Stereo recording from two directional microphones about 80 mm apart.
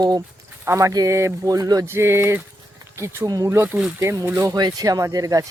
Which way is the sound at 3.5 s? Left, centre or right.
Right.